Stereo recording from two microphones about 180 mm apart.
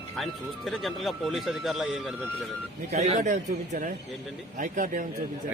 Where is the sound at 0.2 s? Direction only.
Centre (ahead or behind).